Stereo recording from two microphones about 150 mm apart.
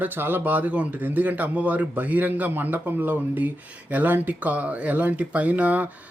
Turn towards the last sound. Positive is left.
turn(degrees=-10)  # may be behind; listen again after turning